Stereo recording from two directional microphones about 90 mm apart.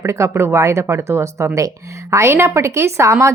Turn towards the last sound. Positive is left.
turn(degrees=-30)  # may be behind; listen again after turning